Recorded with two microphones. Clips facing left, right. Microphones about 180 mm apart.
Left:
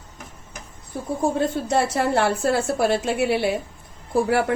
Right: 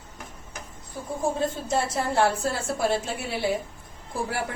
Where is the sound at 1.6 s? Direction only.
70° left (ahead or behind).